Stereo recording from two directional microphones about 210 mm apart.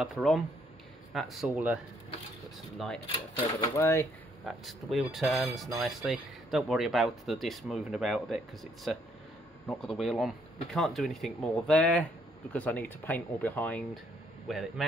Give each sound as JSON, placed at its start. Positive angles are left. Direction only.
{"t": 0.0, "sound": "speech", "side_deg": 0}
{"t": 3.7, "sound": "speech", "side_deg": 15}
{"t": 4.5, "sound": "speech", "side_deg": 0}